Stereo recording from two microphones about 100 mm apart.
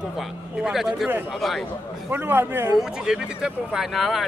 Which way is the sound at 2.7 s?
5° right (ahead or behind).